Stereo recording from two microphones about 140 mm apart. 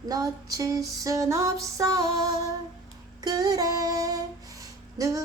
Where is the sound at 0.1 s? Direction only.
25° right (ahead or behind).